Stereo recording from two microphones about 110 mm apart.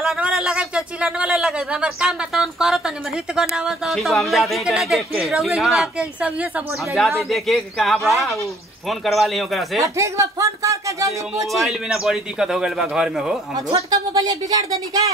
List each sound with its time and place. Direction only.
0.0 s speech: 5° right (ahead or behind)
9.9 s speech: 30° right (ahead or behind)
11.6 s speech: 5° right (ahead or behind)
13.8 s speech: 35° right (ahead or behind)